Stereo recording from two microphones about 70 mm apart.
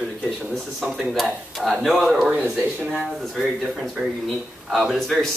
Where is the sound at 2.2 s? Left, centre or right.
Centre.